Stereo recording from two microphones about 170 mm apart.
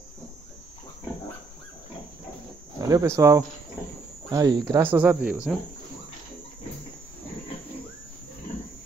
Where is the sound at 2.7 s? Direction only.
20° right (ahead or behind).